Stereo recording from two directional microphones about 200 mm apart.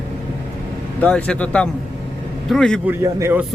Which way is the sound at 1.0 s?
5° left (ahead or behind).